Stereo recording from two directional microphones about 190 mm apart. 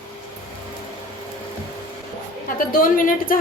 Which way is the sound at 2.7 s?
45° left (ahead or behind).